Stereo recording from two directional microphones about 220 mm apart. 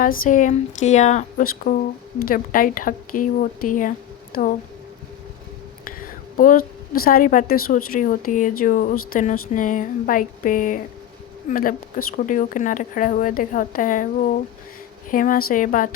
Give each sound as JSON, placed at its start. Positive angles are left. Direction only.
{"t": 0.0, "sound": "speech", "side_deg": 40}
{"t": 6.3, "sound": "a woman's voice", "side_deg": 40}